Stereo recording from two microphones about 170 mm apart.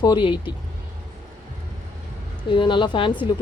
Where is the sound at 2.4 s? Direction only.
30° left (ahead or behind).